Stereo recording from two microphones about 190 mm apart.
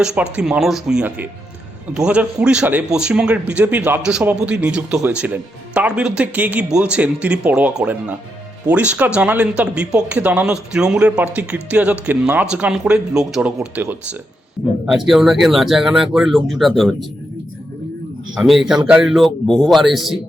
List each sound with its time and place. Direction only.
0.0 s a man's voice: 5° right (ahead or behind)
18.3 s a man's voice: centre (ahead or behind)